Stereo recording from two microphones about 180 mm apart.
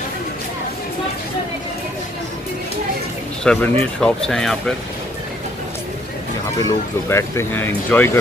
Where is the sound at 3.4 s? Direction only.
5° left (ahead or behind).